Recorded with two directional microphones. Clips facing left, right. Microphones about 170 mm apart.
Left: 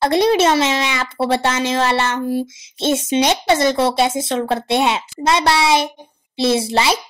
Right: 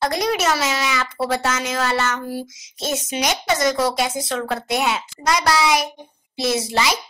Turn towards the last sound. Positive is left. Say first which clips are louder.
# left 4 dB
turn(degrees=30)  # may be behind; listen again after turning